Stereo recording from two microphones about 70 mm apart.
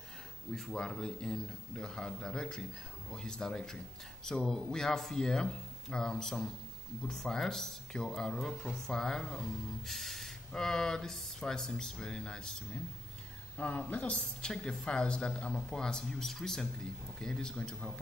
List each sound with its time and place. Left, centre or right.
0.5 s speech: centre
13.6 s speech: centre